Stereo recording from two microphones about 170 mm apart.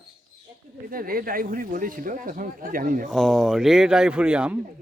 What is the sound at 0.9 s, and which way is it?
Speech, 55° right (ahead or behind).